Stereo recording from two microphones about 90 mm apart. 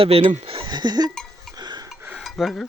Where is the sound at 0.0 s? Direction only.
90° right; by 1.1 s 50° right (ahead or behind).